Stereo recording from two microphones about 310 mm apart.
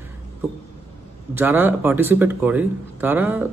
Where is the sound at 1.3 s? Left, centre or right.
Centre.